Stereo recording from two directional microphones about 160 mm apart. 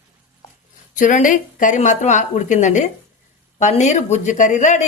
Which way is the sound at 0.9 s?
55° left (ahead or behind).